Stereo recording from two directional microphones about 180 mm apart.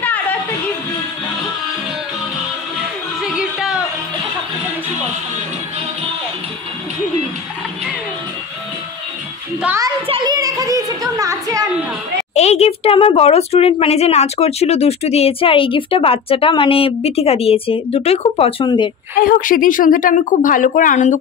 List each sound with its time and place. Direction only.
0.0 s music: 10° left (ahead or behind)
3.2 s music: 5° right (ahead or behind)
10.0 s a woman's voice: 25° right (ahead or behind)
12.4 s speech: 35° left (ahead or behind)
19.1 s a woman's voice: 50° left (ahead or behind)